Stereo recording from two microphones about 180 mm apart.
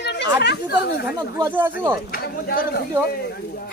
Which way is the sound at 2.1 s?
55° left (ahead or behind).